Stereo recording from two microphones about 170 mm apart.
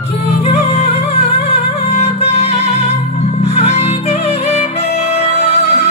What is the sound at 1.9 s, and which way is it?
Music, 40° left (ahead or behind).